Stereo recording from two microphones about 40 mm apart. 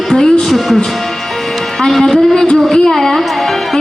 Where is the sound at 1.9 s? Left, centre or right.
Centre.